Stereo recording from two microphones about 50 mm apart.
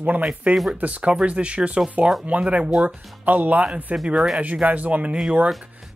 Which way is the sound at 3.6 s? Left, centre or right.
Right.